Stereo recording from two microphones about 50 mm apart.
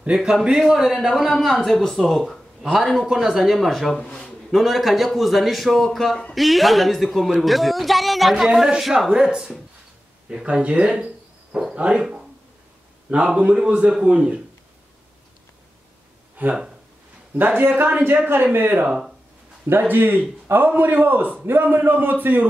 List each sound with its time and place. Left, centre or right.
0.1 s a man's voice: centre
4.0 s speech: centre
4.5 s a man's voice: centre
8.6 s a man's voice: centre
10.4 s a man's voice: right
16.4 s speech: right
18.9 s speech: centre
19.9 s a man's voice: right